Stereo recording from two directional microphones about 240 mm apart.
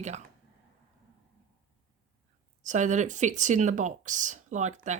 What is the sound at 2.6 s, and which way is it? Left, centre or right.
Speech, right.